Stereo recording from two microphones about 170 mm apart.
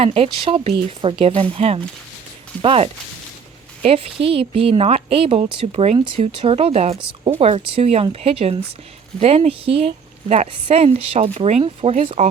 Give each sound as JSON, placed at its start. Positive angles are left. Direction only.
{"t": 0.0, "sound": "a woman's voice", "side_deg": -35}